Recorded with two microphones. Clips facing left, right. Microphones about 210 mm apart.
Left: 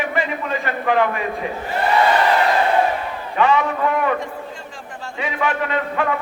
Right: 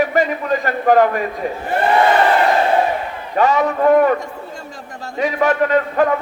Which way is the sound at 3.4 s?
40° right (ahead or behind).